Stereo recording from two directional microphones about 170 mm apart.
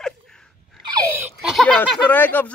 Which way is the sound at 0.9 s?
15° right (ahead or behind).